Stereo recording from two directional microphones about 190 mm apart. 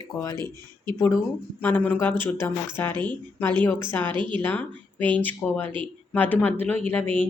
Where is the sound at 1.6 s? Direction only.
10° left (ahead or behind).